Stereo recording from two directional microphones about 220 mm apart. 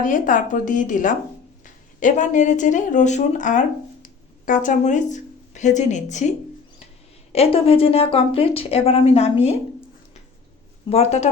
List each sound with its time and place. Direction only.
0.0 s a woman's voice: 35° left (ahead or behind)
7.3 s a woman's voice: 25° left (ahead or behind)
10.8 s a woman's voice: 30° left (ahead or behind)